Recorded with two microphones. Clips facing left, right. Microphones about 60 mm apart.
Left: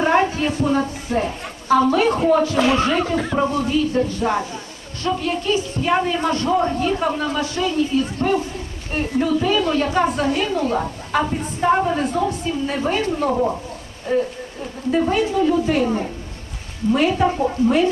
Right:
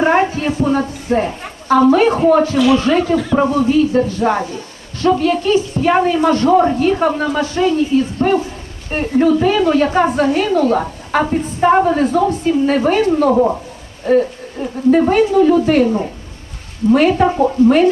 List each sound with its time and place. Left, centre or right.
0.0 s a sound: right
0.7 s a woman's voice: right
2.6 s speech: left
3.7 s a woman's voice: right
13.3 s speech: centre
14.1 s a woman's voice: right
16.9 s a woman's voice: right